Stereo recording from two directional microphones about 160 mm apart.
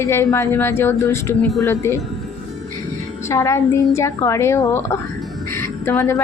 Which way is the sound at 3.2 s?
20° left (ahead or behind).